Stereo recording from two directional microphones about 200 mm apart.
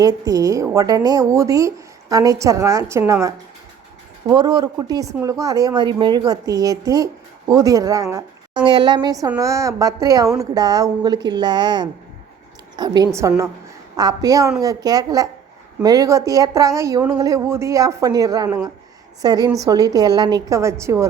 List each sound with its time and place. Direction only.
0.0 s a woman's voice: 15° right (ahead or behind)